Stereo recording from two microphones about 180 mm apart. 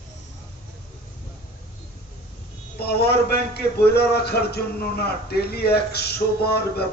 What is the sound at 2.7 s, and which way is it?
A man's voice, 60° left (ahead or behind).